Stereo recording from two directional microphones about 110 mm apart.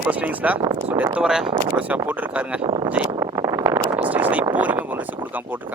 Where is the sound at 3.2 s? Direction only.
30° right (ahead or behind).